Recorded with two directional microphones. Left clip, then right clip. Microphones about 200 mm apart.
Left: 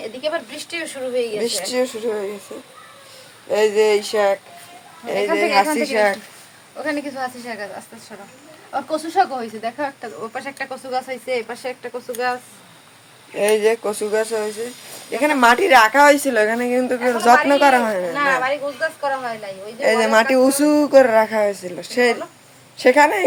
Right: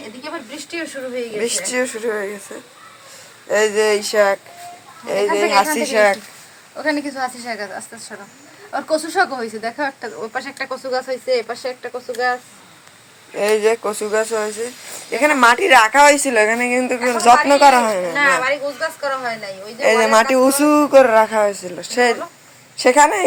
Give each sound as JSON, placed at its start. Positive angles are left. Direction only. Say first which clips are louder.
{"t": 1.4, "sound": "speech", "louder": "right 1 dB", "side_deg": 0}
{"t": 3.5, "sound": "speech", "louder": "even", "side_deg": -10}
{"t": 6.7, "sound": "speech", "louder": "right 3 dB", "side_deg": -30}
{"t": 8.7, "sound": "speech", "louder": "right 1 dB", "side_deg": -35}
{"t": 10.3, "sound": "speech", "louder": "right 4 dB", "side_deg": -10}
{"t": 18.1, "sound": "speech", "louder": "right 3 dB", "side_deg": -25}
{"t": 19.8, "sound": "speech", "louder": "right 2 dB", "side_deg": -5}